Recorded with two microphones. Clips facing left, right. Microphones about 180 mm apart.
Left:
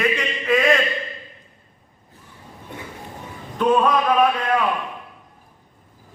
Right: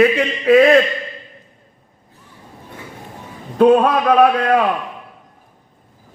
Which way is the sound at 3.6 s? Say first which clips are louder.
Right 6 dB; 45° right (ahead or behind).